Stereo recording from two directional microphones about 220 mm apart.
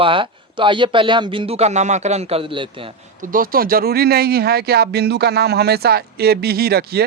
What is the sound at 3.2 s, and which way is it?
Speech, 40° right (ahead or behind).